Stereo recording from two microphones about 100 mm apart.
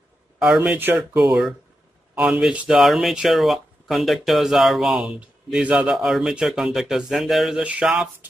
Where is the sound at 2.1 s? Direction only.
10° right (ahead or behind).